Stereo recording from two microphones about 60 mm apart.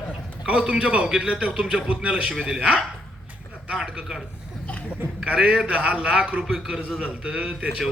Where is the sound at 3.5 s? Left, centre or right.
Centre.